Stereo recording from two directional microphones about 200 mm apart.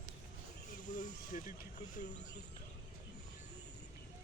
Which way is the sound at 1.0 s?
40° left (ahead or behind).